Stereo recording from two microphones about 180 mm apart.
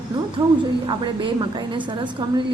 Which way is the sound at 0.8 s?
25° right (ahead or behind).